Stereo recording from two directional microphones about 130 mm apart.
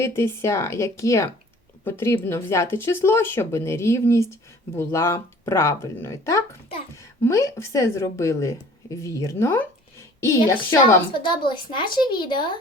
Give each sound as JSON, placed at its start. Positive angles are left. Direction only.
{"t": 0.0, "sound": "a woman's voice", "side_deg": 20}
{"t": 11.2, "sound": "speech", "side_deg": 40}